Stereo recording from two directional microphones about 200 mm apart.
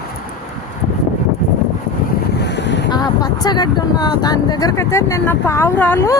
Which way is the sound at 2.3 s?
60° left (ahead or behind).